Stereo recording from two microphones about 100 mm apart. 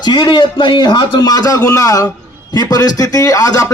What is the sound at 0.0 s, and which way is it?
A man's voice, 45° left (ahead or behind).